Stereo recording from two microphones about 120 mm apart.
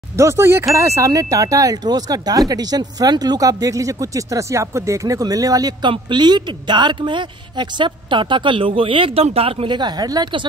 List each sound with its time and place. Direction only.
0.2 s speech: 25° right (ahead or behind)